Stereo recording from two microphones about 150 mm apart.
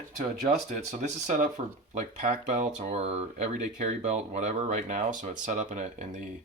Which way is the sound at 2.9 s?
45° right (ahead or behind).